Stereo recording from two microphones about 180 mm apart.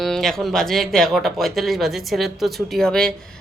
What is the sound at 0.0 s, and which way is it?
Speech, centre (ahead or behind).